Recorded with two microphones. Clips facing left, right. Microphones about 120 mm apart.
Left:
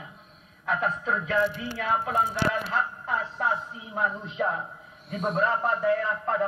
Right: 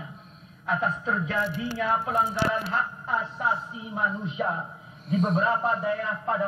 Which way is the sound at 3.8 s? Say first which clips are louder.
Even; 10° right (ahead or behind).